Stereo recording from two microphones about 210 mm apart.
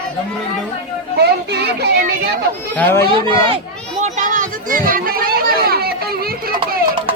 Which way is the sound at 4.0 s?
35° right (ahead or behind).